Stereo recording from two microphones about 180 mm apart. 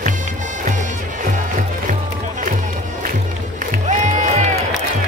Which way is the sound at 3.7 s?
45° right (ahead or behind).